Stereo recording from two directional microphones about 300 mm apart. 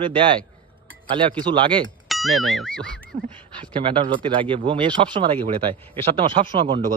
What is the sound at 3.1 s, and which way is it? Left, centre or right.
Speech, right.